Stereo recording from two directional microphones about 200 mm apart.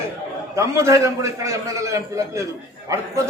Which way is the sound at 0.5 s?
15° right (ahead or behind).